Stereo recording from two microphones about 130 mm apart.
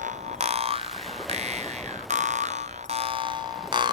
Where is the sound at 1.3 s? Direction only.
55° right (ahead or behind).